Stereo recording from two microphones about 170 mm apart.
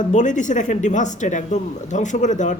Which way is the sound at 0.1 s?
45° left (ahead or behind).